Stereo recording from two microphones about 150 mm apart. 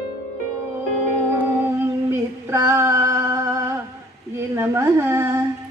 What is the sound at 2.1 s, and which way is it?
Female singing, 20° right (ahead or behind).